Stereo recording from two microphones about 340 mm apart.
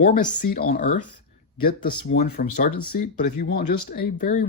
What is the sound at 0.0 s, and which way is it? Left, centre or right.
Speech, left.